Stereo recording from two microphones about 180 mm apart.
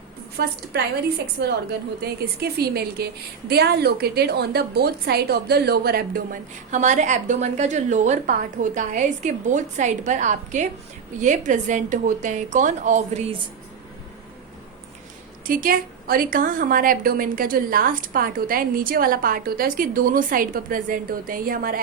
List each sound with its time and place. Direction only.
0.4 s a woman's voice: 65° right (ahead or behind)
6.7 s a woman's voice: 40° right (ahead or behind)
15.4 s a woman's voice: 50° right (ahead or behind)